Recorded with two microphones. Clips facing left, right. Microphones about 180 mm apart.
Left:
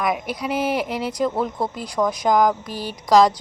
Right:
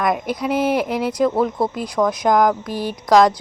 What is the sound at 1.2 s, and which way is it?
A woman's voice, 10° right (ahead or behind).